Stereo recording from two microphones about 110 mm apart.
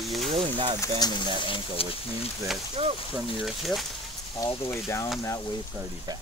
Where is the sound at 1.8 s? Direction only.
60° left (ahead or behind).